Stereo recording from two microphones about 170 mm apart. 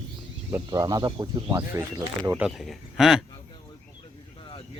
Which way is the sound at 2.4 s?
Centre (ahead or behind).